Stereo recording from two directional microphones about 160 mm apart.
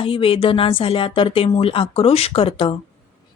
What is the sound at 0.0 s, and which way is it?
A woman's voice, 35° left (ahead or behind).